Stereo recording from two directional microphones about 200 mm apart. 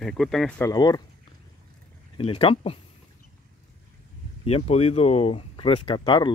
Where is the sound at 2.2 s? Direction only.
30° left (ahead or behind).